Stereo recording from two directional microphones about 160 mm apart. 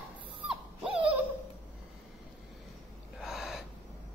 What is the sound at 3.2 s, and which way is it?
Gasp, centre (ahead or behind).